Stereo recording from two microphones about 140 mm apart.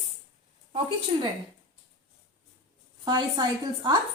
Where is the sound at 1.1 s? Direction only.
45° right (ahead or behind).